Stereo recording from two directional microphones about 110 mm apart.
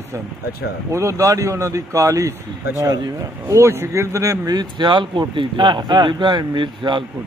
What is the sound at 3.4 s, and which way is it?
Speech, 25° right (ahead or behind).